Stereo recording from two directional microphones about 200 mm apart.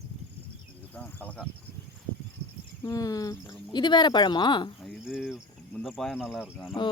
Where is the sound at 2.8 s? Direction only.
15° left (ahead or behind).